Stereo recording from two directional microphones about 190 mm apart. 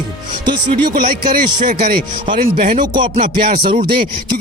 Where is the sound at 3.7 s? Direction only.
25° right (ahead or behind).